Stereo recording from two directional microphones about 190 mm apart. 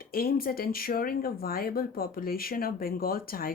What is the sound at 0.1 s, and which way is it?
Speech, 50° left (ahead or behind).